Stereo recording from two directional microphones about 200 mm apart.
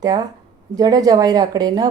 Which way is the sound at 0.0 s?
20° right (ahead or behind).